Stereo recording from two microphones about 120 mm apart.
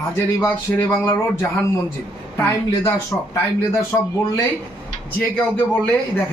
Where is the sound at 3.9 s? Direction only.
20° left (ahead or behind).